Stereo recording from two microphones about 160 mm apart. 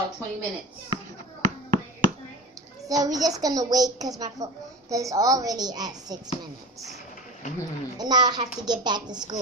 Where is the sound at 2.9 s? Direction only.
25° right (ahead or behind).